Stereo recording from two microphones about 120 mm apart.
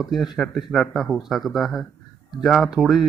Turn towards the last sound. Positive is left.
turn(degrees=0)  # may be behind; listen again after turning